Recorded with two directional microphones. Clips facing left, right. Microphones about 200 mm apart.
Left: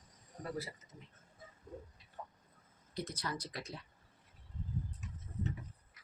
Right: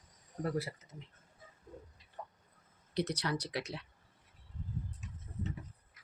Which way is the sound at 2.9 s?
75° right (ahead or behind).